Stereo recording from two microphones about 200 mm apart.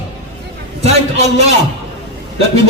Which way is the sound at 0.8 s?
35° right (ahead or behind).